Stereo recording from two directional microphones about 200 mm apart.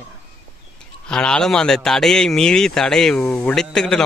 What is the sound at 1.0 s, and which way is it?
A man's voice, 5° left (ahead or behind).